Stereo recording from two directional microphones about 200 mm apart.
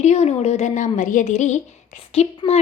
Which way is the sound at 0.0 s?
35° left (ahead or behind).